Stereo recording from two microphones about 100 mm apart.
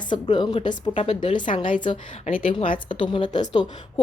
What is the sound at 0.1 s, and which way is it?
A woman's voice, 50° left (ahead or behind).